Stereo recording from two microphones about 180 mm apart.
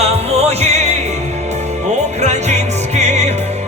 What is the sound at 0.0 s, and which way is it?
Music, 35° right (ahead or behind).